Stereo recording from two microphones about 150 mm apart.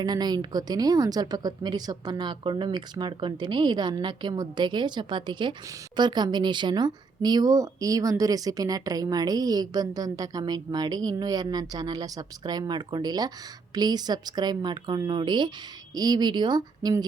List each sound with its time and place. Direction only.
0.0 s speech: 30° right (ahead or behind)